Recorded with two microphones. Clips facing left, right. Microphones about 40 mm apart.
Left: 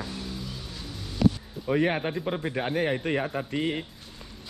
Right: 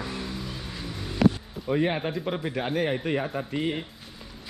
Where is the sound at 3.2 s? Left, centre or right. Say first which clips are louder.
Even; centre.